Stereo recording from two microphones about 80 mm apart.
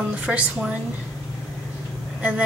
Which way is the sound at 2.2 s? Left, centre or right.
Centre.